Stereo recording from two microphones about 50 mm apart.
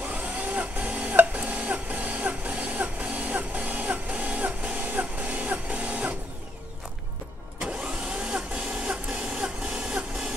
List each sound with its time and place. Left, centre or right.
0.0 s printer: right
7.5 s vacuum cleaner: centre